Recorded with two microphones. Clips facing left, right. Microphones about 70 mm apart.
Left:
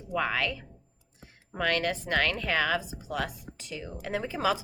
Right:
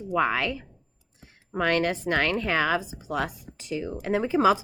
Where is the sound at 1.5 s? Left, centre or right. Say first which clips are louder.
Right 4 dB; right.